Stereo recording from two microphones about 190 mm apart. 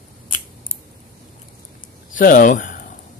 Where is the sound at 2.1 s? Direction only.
45° left (ahead or behind).